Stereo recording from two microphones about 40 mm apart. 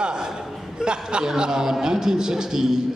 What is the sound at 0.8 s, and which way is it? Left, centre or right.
A man's voice, centre.